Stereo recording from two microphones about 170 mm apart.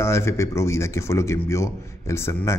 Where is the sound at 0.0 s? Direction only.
15° left (ahead or behind).